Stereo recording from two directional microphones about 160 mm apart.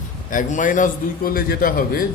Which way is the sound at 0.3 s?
55° left (ahead or behind).